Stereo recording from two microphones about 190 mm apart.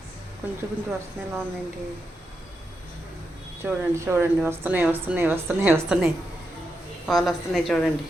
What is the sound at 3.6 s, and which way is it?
A woman's voice, 10° right (ahead or behind).